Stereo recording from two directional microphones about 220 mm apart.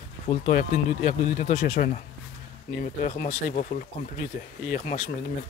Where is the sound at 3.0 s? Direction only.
30° left (ahead or behind).